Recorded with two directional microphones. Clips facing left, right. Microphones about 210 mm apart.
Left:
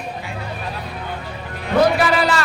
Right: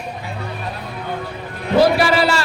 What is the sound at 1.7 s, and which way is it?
Music, 30° right (ahead or behind).